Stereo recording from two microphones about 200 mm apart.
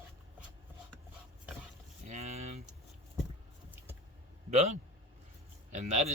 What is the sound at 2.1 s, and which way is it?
Speech, 35° right (ahead or behind).